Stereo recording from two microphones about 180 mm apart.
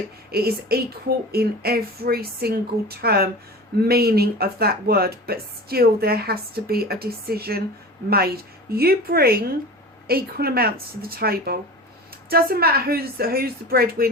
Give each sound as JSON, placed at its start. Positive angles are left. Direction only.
{"t": 0.3, "sound": "speech", "side_deg": -60}
{"t": 8.7, "sound": "speech", "side_deg": -55}